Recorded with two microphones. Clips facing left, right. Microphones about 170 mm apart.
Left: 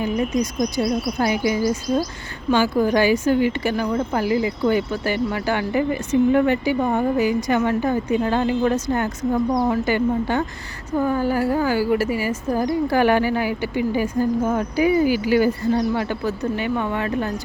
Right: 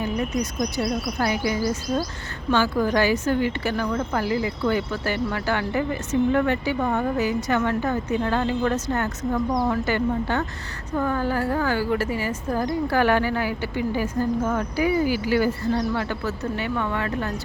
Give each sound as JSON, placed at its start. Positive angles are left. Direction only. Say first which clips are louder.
{"t": 0.0, "sound": "a woman's voice", "louder": "left 4 dB", "side_deg": 15}